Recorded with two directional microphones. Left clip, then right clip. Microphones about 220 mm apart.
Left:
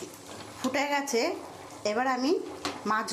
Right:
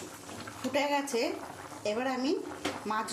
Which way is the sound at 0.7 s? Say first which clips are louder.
Left 2 dB; 15° left (ahead or behind).